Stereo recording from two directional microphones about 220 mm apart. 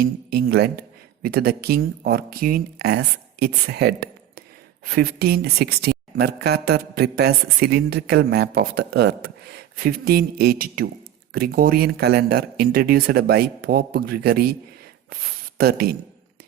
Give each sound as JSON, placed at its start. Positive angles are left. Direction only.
{"t": 0.0, "sound": "a woman's voice", "side_deg": -45}